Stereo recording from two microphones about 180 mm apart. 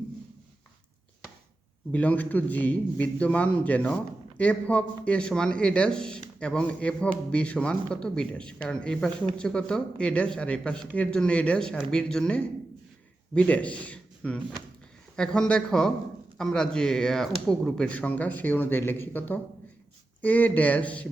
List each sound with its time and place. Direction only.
1.9 s a man's voice: 10° left (ahead or behind)